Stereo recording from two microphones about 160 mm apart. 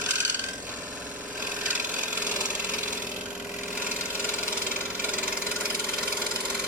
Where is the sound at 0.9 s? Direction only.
10° right (ahead or behind).